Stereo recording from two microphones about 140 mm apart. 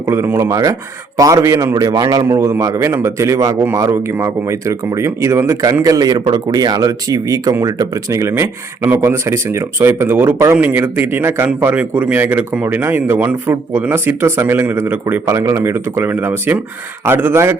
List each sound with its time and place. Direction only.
0.1 s speech: 15° right (ahead or behind)